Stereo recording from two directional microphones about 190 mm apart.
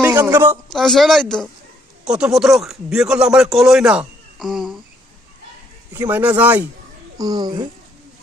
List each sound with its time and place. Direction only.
0.0 s a woman's voice: 10° right (ahead or behind)
0.7 s speech: centre (ahead or behind)
5.9 s speech: 10° right (ahead or behind)
7.2 s speech: 20° right (ahead or behind)